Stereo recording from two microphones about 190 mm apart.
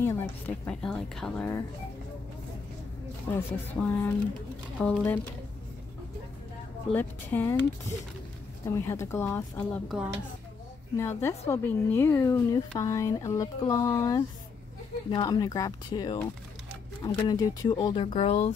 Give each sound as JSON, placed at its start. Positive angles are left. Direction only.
{"t": 0.0, "sound": "speech", "side_deg": 10}
{"t": 3.3, "sound": "speech", "side_deg": 10}
{"t": 6.9, "sound": "speech", "side_deg": 10}
{"t": 8.7, "sound": "speech", "side_deg": 15}
{"t": 11.0, "sound": "speech", "side_deg": 15}